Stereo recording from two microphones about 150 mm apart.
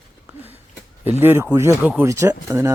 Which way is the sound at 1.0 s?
15° right (ahead or behind).